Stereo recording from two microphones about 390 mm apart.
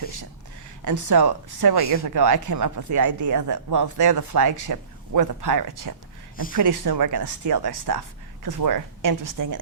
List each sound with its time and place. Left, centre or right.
0.9 s speech: right
6.3 s speech: left
6.6 s speech: right